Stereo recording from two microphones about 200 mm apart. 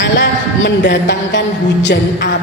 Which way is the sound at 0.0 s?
60° left (ahead or behind).